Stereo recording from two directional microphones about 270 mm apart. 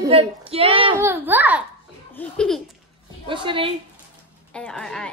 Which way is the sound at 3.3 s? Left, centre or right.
Centre.